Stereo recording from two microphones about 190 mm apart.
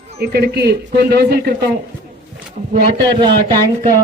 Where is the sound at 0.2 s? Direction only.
60° right (ahead or behind).